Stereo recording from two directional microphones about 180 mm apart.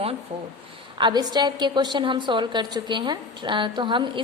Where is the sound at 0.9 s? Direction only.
25° right (ahead or behind).